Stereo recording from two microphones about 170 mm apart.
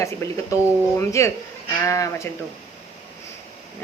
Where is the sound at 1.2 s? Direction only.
20° left (ahead or behind).